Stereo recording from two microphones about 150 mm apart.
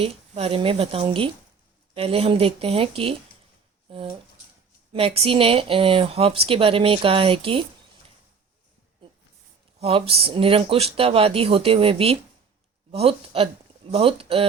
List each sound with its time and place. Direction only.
0.0 s speech: 40° right (ahead or behind)
9.8 s speech: 40° right (ahead or behind)